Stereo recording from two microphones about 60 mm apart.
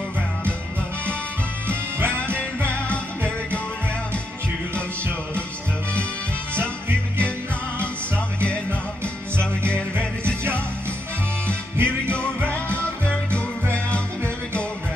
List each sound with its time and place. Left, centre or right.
2.0 s music: right
11.4 s music: right